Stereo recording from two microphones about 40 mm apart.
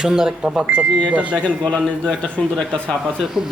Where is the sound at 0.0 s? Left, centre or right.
Centre.